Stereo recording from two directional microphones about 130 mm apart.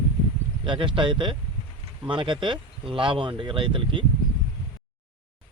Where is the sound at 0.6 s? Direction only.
40° right (ahead or behind).